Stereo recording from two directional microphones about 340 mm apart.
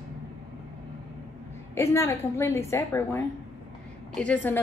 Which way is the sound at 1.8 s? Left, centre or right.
Centre.